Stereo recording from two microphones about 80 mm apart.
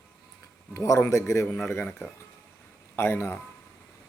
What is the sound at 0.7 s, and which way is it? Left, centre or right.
Speech, left.